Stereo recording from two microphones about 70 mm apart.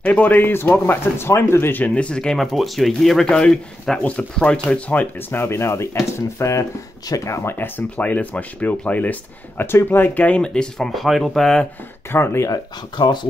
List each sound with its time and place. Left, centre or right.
0.0 s speech: left
2.0 s a man's voice: centre
2.3 s a man's voice: centre
5.3 s speech: left; by 10.9 s centre
10.9 s speech: centre
12.1 s speech: left
12.4 s speech: left